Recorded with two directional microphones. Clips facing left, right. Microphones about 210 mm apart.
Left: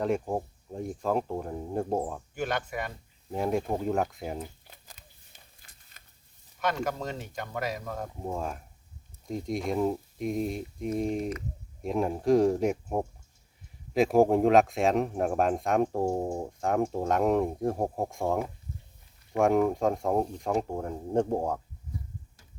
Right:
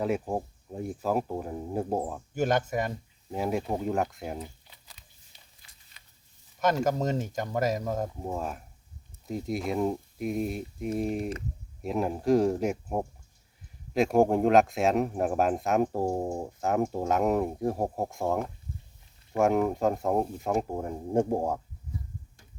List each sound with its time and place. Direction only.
0.0 s speech: 5° right (ahead or behind)
2.3 s speech: 45° right (ahead or behind)
3.3 s speech: 5° right (ahead or behind)
4.6 s a sound: 45° left (ahead or behind)
6.6 s speech: 40° right (ahead or behind)
8.2 s speech: 5° right (ahead or behind)